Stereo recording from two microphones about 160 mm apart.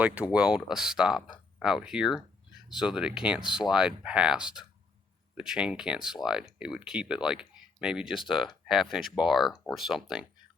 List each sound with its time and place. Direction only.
0.0 s speech: 10° right (ahead or behind)